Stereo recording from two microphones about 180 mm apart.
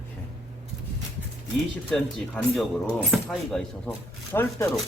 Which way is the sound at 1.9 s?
5° left (ahead or behind).